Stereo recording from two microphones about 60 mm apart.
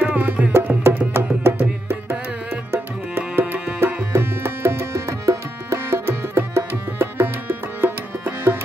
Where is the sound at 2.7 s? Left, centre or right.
Right.